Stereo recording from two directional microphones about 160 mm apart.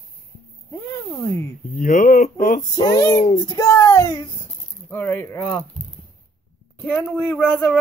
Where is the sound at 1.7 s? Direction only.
60° left (ahead or behind).